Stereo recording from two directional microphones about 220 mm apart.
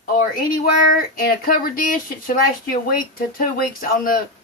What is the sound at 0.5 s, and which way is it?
Speech, 40° left (ahead or behind).